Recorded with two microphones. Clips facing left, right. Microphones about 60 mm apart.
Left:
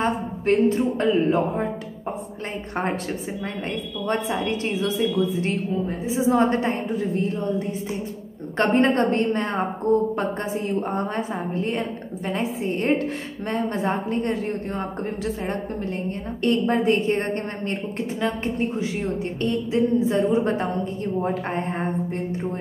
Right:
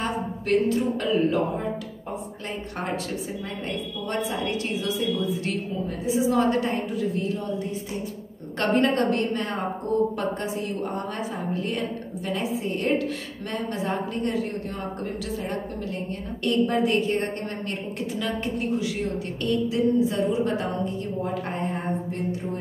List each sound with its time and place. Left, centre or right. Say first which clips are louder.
0.0 s a woman's voice: left 5 dB; left
4.1 s a woman's voice: left 3 dB; left
10.7 s a woman's voice: left 4 dB; left